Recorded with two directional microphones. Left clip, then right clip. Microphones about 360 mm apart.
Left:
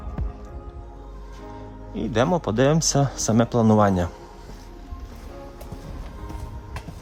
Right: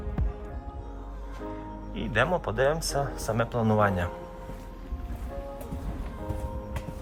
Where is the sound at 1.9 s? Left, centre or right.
Centre.